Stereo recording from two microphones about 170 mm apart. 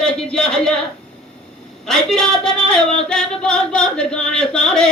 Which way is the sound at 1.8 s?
Centre (ahead or behind).